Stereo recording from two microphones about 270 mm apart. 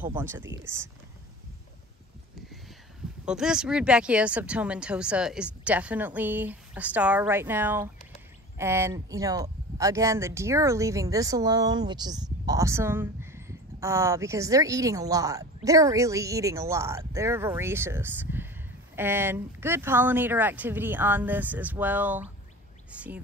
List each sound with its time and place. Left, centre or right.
0.1 s speech: centre
0.4 s speech: right
3.3 s speech: centre